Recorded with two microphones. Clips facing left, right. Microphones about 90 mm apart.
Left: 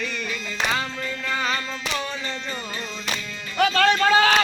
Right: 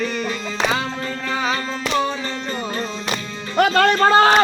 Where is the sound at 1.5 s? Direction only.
40° right (ahead or behind).